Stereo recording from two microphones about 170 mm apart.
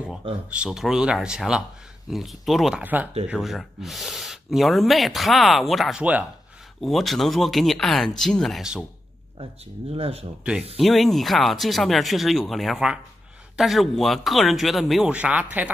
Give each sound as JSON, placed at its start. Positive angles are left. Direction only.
{"t": 0.5, "sound": "speech", "side_deg": -5}
{"t": 9.4, "sound": "speech", "side_deg": -35}
{"t": 10.4, "sound": "speech", "side_deg": -5}